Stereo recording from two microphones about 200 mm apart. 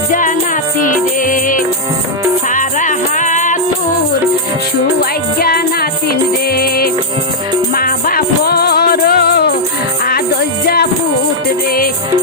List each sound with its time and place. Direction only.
0.1 s music: 40° left (ahead or behind)
5.4 s music: 50° left (ahead or behind)